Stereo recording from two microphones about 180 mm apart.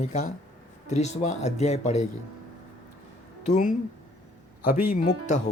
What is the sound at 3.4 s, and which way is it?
Speech, 45° left (ahead or behind).